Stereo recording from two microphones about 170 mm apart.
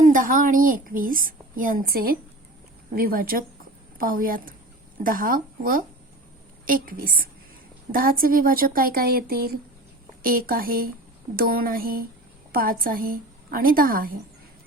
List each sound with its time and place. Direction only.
0.1 s a woman's voice: 55° right (ahead or behind)